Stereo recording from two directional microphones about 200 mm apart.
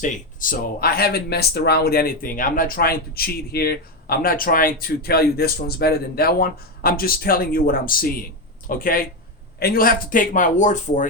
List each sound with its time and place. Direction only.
0.0 s speech: 40° left (ahead or behind)